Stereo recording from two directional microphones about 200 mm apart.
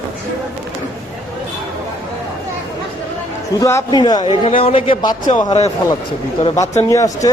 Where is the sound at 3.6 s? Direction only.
15° left (ahead or behind).